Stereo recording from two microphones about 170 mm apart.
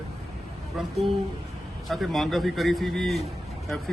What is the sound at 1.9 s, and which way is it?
A man's voice, centre (ahead or behind).